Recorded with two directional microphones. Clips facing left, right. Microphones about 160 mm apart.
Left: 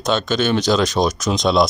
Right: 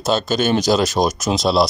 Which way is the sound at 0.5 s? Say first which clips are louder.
Right 1 dB; 10° right (ahead or behind).